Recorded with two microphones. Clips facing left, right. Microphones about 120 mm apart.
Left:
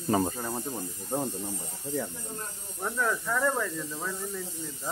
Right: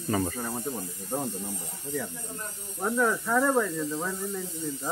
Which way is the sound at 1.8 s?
20° left (ahead or behind).